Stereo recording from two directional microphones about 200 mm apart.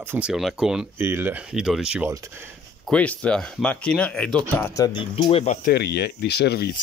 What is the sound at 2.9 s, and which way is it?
Speech, 5° left (ahead or behind).